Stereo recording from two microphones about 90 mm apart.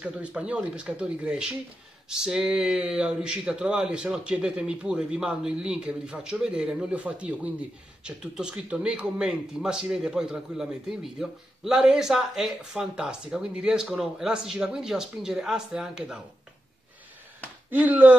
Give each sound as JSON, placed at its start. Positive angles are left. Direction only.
{"t": 0.0, "sound": "speech", "side_deg": -15}
{"t": 17.6, "sound": "speech", "side_deg": -20}